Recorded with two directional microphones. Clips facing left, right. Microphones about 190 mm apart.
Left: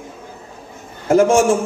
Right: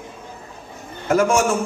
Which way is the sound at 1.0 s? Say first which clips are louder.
Left 5 dB; 30° left (ahead or behind).